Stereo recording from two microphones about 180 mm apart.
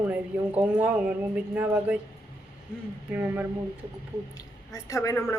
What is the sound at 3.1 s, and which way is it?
Speech, 10° right (ahead or behind).